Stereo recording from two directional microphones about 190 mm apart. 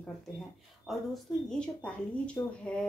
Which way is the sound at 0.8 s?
Centre (ahead or behind).